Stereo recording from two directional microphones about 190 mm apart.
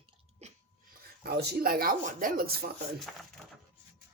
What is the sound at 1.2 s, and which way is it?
Speech, 55° right (ahead or behind).